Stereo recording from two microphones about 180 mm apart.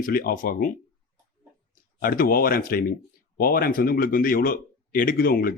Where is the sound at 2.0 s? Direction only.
50° left (ahead or behind).